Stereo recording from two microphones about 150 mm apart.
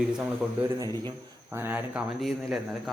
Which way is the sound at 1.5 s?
15° right (ahead or behind).